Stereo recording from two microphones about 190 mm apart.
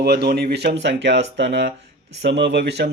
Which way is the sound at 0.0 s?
55° right (ahead or behind).